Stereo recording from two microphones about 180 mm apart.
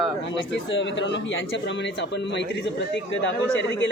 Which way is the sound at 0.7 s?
90° left.